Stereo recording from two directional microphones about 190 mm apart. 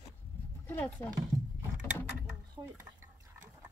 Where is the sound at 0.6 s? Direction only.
10° left (ahead or behind).